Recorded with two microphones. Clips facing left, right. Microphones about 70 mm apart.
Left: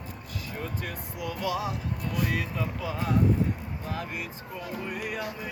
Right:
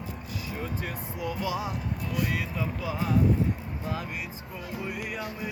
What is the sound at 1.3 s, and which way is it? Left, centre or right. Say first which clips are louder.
Speech: left 1 dB; centre.